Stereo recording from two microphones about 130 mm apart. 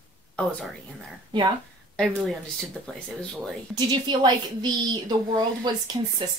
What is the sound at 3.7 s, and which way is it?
Speech, 35° right (ahead or behind).